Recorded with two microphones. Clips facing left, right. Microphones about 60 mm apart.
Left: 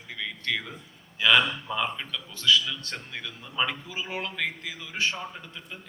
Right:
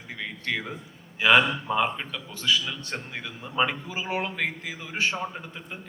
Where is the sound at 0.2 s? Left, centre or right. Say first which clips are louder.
Even; right.